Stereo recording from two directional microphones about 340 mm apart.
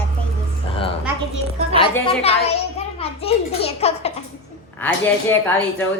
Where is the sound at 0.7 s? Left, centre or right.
Centre.